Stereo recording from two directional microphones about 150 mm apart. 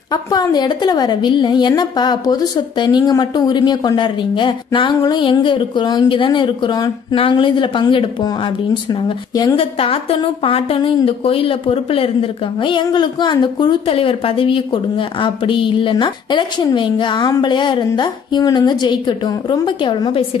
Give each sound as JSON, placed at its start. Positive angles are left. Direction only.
{"t": 0.1, "sound": "a woman's voice", "side_deg": 25}
{"t": 9.6, "sound": "a woman's voice", "side_deg": 40}